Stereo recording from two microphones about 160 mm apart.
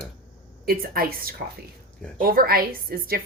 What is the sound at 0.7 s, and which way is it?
A woman's voice, 65° right (ahead or behind).